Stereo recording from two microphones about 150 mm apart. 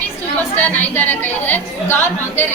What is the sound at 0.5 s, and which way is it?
A woman's voice, 10° left (ahead or behind).